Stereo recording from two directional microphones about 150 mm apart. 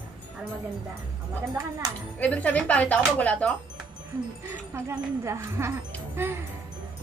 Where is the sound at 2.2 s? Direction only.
10° left (ahead or behind).